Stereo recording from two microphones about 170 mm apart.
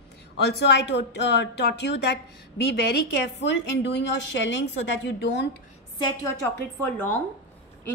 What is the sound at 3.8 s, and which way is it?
A woman's voice, 90° left.